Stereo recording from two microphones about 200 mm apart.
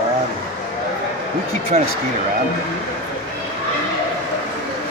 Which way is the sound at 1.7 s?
35° right (ahead or behind).